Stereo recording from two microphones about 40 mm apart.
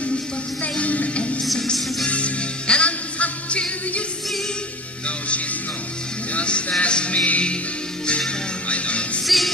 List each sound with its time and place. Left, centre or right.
0.7 s music: left
1.4 s music: centre
2.0 s music: left
6.3 s music: left
8.6 s music: left
9.2 s music: centre